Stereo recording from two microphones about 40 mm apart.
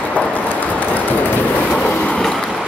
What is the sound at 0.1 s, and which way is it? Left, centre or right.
Train, left.